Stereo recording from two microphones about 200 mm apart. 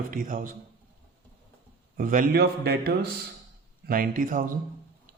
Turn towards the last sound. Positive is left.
turn(degrees=-45)  # may be behind; listen again after turning